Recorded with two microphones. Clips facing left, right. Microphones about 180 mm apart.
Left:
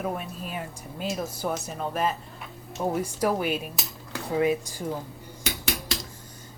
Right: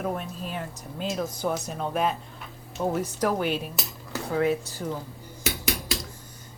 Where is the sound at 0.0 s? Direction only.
5° left (ahead or behind).